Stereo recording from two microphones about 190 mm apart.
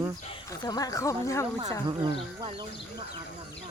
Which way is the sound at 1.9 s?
25° right (ahead or behind).